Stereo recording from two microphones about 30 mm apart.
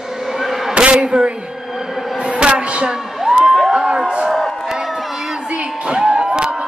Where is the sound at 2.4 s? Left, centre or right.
Right.